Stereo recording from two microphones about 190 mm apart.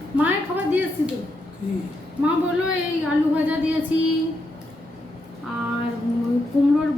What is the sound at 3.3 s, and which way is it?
Speech, 10° right (ahead or behind).